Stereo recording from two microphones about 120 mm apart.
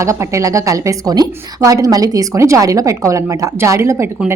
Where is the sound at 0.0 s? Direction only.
25° right (ahead or behind).